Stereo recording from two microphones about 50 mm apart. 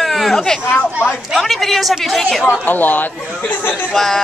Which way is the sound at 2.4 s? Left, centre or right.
Left.